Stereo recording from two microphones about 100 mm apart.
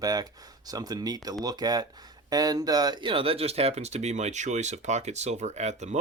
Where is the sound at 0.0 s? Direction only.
40° right (ahead or behind); by 5.9 s 90° right.